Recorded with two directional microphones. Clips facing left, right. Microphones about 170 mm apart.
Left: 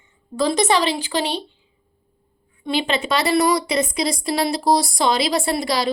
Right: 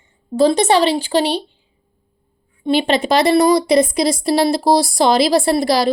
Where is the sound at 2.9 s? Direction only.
35° right (ahead or behind).